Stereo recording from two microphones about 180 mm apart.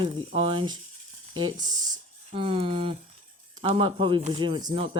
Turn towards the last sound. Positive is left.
turn(degrees=-30)  # may be behind; listen again after turning